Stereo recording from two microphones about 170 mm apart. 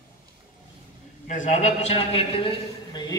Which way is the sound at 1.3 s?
45° left (ahead or behind).